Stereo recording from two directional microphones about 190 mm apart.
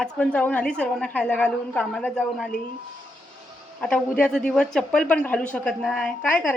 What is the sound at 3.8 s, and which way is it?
Speech, 5° left (ahead or behind).